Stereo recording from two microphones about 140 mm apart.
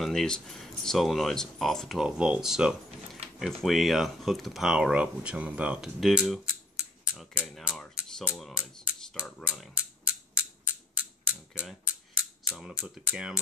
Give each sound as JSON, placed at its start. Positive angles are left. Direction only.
{"t": 0.0, "sound": "speech", "side_deg": 5}
{"t": 8.3, "sound": "a sound", "side_deg": -5}
{"t": 11.5, "sound": "speech", "side_deg": -10}